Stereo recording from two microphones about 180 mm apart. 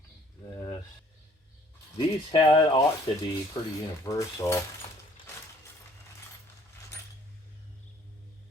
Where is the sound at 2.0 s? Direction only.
25° left (ahead or behind).